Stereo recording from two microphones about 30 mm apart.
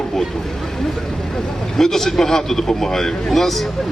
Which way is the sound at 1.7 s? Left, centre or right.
Centre.